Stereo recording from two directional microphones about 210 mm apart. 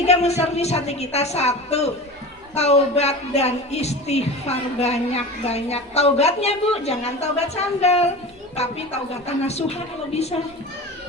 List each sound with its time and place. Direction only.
0.0 s speech: 30° left (ahead or behind)
9.2 s speech: 30° left (ahead or behind)